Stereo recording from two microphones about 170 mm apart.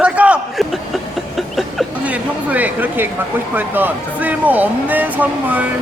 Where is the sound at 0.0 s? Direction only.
5° right (ahead or behind).